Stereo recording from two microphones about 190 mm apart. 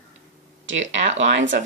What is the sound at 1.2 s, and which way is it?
Speech, 80° right.